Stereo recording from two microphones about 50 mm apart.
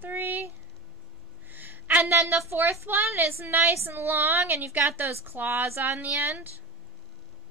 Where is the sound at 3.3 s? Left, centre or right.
Right.